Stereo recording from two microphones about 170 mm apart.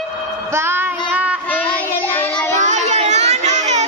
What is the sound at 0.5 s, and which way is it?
Child singing, 15° right (ahead or behind).